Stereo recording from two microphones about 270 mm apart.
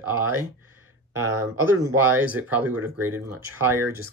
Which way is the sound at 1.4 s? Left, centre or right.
Centre.